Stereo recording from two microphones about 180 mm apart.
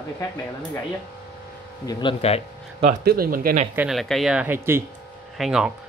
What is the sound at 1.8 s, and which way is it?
Speech, 30° left (ahead or behind).